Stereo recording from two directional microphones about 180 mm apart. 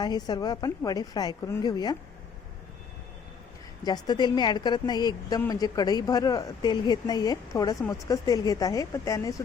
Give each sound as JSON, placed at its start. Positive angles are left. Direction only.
{"t": 0.0, "sound": "speech", "side_deg": 20}
{"t": 3.8, "sound": "speech", "side_deg": 20}